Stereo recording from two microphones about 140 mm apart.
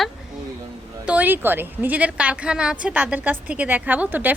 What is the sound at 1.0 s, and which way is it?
A woman's voice, 10° right (ahead or behind).